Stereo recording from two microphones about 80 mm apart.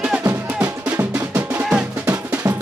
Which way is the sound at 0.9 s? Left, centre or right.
Centre.